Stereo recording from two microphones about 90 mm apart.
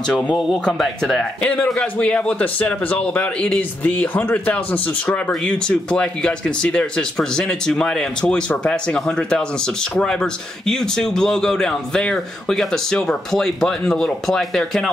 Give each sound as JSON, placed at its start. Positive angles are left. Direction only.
{"t": 0.4, "sound": "speech", "side_deg": 0}
{"t": 1.4, "sound": "speech", "side_deg": 10}
{"t": 5.3, "sound": "speech", "side_deg": 10}